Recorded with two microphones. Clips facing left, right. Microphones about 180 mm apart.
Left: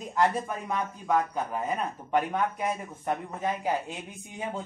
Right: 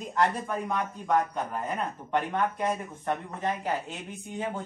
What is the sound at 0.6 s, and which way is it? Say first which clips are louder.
A man's voice: even; 5° left (ahead or behind).